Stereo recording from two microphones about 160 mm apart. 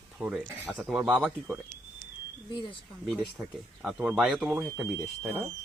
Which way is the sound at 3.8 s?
5° right (ahead or behind).